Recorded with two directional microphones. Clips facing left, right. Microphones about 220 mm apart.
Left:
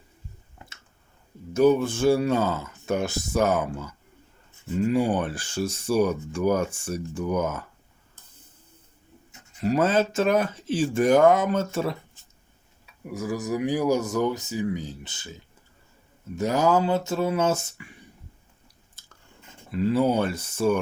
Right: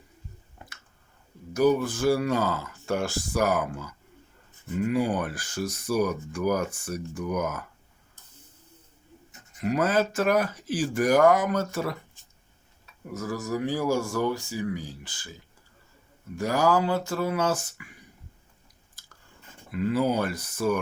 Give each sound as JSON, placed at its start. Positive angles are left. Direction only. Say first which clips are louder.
{"t": 1.5, "sound": "speech", "louder": "left 3 dB", "side_deg": 25}
{"t": 9.6, "sound": "speech", "louder": "left 2 dB", "side_deg": 30}
{"t": 12.8, "sound": "speech", "louder": "left 2 dB", "side_deg": 10}
{"t": 19.7, "sound": "speech", "louder": "left 3 dB", "side_deg": 30}